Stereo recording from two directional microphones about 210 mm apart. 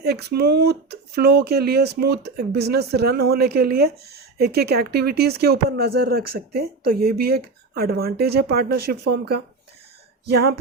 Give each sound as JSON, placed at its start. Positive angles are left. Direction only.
{"t": 0.0, "sound": "speech", "side_deg": -50}